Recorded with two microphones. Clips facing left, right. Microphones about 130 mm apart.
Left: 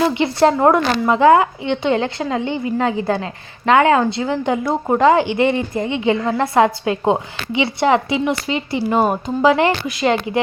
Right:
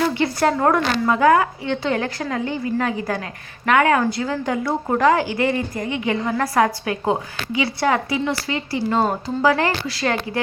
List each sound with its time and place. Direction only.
0.0 s a woman's voice: 20° left (ahead or behind)